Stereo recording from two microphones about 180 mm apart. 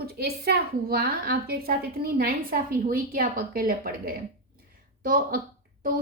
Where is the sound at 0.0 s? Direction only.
60° right (ahead or behind).